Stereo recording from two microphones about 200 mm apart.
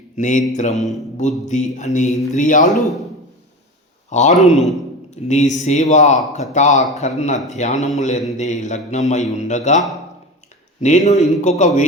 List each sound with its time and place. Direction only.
0.2 s speech: 40° left (ahead or behind)
2.6 s speech: centre (ahead or behind)
4.1 s speech: 35° left (ahead or behind)